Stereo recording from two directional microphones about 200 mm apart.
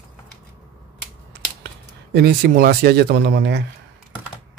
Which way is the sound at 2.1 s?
50° right (ahead or behind).